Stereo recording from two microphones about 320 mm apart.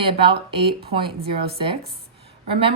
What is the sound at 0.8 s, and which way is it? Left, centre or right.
Speech, right.